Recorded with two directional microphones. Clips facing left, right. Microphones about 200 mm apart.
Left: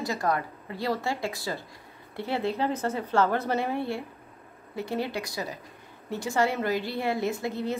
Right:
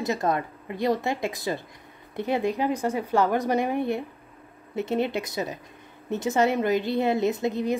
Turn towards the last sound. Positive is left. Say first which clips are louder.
# right 5 dB
turn(degrees=-15)  # may be behind; listen again after turning